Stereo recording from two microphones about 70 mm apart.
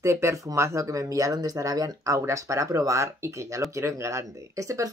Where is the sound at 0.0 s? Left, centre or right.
Right.